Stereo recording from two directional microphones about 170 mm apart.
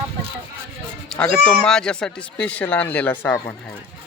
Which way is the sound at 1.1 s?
5° left (ahead or behind).